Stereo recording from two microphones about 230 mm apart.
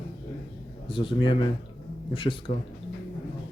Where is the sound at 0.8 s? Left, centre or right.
Left.